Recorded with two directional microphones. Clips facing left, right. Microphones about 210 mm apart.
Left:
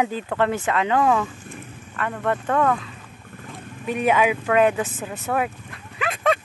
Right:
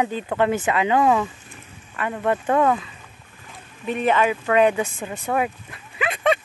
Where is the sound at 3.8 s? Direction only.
10° left (ahead or behind).